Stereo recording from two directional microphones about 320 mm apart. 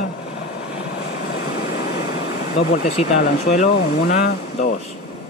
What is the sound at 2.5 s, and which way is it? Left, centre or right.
Speech, left.